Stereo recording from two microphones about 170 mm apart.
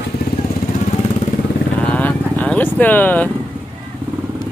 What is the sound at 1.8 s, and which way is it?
Vehicle, 10° left (ahead or behind).